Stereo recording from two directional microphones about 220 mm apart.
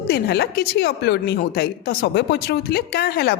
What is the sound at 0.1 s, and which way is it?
A woman's voice, 45° left (ahead or behind).